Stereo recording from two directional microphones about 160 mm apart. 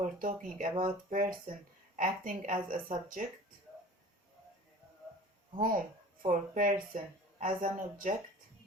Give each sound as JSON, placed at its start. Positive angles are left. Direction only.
{"t": 0.0, "sound": "speech", "side_deg": -55}
{"t": 5.5, "sound": "speech", "side_deg": -60}